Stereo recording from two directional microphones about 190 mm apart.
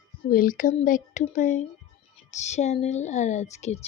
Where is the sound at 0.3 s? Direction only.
45° left (ahead or behind).